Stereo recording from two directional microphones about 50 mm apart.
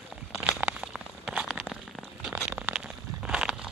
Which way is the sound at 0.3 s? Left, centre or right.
Right.